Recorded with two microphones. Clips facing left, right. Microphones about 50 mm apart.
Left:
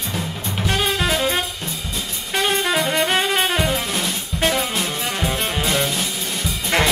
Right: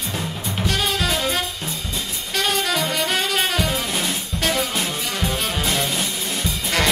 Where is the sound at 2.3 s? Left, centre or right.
Left.